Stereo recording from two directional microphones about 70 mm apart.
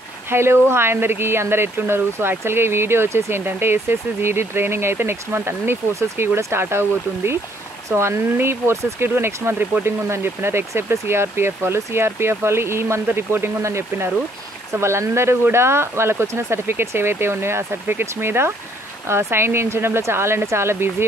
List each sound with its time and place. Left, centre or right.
0.3 s speech: right